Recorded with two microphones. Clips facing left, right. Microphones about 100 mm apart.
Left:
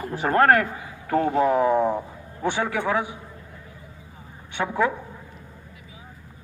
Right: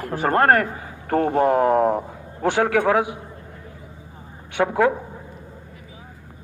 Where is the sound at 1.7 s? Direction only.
80° right.